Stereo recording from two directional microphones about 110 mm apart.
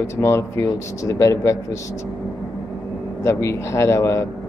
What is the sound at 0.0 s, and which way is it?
A man's voice, 25° left (ahead or behind).